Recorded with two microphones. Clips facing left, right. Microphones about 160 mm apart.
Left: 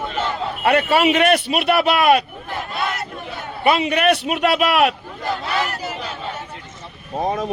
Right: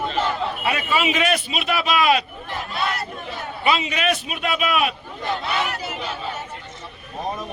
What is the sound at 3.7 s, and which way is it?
A man's voice, 60° left (ahead or behind).